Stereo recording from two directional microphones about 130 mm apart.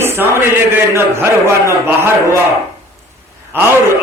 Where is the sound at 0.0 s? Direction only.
20° right (ahead or behind).